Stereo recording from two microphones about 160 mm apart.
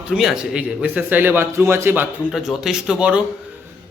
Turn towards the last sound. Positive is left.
turn(degrees=-5)  # may be behind; listen again after turning